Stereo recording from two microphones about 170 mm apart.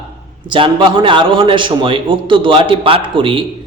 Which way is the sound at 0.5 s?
30° right (ahead or behind).